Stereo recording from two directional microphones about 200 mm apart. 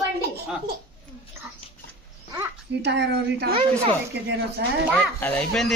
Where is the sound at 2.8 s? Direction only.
60° right (ahead or behind).